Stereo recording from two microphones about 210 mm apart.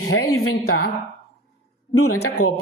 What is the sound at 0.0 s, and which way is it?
Speech, 90° left.